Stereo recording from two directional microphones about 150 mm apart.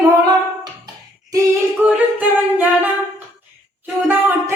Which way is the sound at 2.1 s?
10° right (ahead or behind).